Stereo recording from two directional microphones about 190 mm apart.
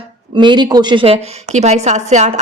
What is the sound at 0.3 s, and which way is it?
A woman's voice, 25° right (ahead or behind).